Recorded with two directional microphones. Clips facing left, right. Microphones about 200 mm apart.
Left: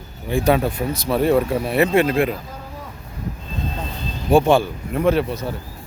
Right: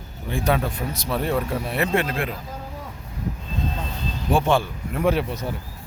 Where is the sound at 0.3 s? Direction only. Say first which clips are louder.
Left 5 dB; 5° left (ahead or behind).